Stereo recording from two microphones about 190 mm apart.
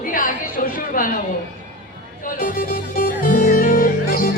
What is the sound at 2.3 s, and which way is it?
Music, 50° left (ahead or behind).